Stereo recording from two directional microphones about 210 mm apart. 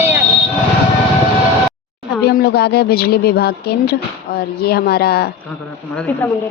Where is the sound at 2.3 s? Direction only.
50° left (ahead or behind).